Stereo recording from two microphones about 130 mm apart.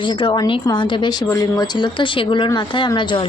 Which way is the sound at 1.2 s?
25° left (ahead or behind).